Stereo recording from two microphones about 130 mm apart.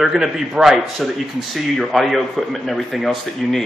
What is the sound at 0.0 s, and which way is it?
Speech, 5° right (ahead or behind).